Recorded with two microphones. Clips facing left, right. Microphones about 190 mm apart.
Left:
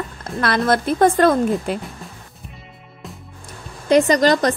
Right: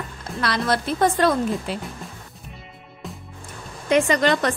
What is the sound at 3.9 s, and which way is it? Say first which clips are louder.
Speech: left 4 dB; 35° left (ahead or behind).